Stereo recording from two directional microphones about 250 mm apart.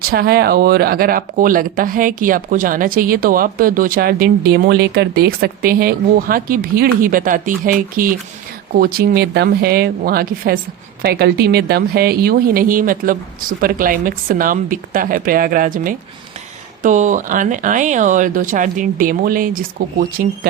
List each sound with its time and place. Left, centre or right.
0.0 s speech: right